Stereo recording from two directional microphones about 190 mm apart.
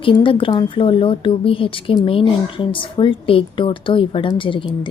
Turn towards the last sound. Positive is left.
turn(degrees=25)  # may be behind; listen again after turning